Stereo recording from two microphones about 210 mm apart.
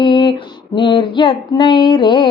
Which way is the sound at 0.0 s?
25° left (ahead or behind).